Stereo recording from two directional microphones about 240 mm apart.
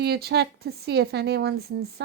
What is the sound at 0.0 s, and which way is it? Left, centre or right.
Speech, right.